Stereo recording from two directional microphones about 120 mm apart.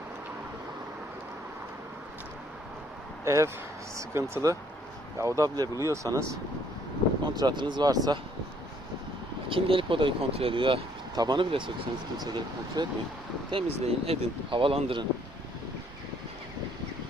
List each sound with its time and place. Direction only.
3.2 s speech: 25° right (ahead or behind)
7.3 s speech: 35° right (ahead or behind)
9.5 s speech: 50° right (ahead or behind)
11.1 s speech: 35° right (ahead or behind)
13.5 s speech: 55° right (ahead or behind)